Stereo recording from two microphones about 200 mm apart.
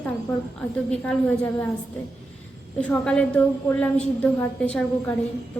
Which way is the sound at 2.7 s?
5° left (ahead or behind).